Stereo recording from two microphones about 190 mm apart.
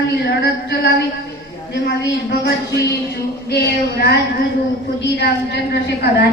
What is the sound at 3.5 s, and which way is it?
A woman's voice, 60° left (ahead or behind).